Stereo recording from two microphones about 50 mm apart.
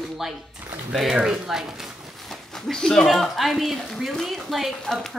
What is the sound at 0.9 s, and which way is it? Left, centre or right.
Speech, centre.